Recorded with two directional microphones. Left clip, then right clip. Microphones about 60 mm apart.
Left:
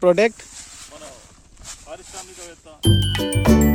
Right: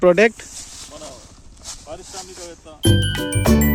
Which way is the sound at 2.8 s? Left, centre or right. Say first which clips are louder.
Right 1 dB; centre.